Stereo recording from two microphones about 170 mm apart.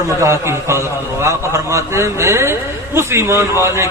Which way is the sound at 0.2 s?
15° right (ahead or behind).